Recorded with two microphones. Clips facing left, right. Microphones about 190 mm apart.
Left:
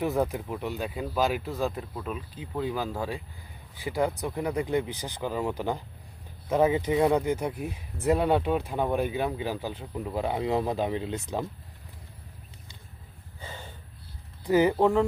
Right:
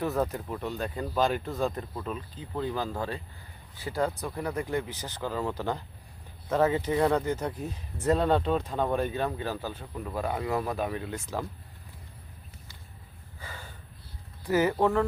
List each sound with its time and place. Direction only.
0.0 s speech: 15° left (ahead or behind)
13.4 s snort: 20° left (ahead or behind)
14.4 s speech: 15° left (ahead or behind)